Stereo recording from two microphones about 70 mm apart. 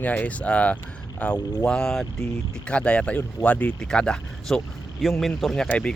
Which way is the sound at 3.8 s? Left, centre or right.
Centre.